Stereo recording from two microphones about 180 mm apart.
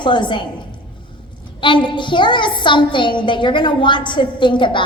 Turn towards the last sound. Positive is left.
turn(degrees=25)  # may be behind; listen again after turning